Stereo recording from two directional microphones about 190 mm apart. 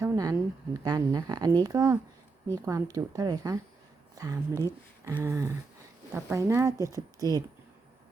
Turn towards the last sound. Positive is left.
turn(degrees=-20)  # may be behind; listen again after turning